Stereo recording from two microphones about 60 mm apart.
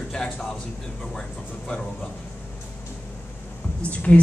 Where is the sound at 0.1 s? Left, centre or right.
Centre.